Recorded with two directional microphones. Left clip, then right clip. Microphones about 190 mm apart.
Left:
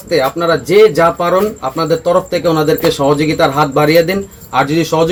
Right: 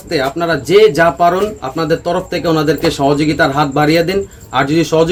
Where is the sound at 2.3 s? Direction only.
25° right (ahead or behind).